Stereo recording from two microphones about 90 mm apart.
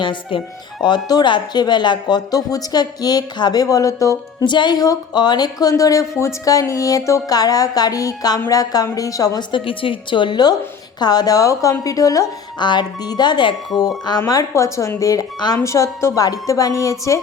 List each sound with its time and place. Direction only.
0.0 s speech: 65° left (ahead or behind)
0.9 s speech: 50° left (ahead or behind)
4.4 s speech: 60° left (ahead or behind); by 9.4 s 40° left (ahead or behind)
9.5 s a woman's voice: 75° left (ahead or behind); by 12.2 s 40° left (ahead or behind)
12.5 s a woman's voice: 55° left (ahead or behind)
14.3 s a woman's voice: 40° left (ahead or behind)